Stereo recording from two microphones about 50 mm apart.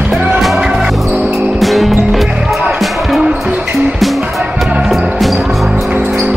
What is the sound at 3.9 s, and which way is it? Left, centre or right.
Music, centre.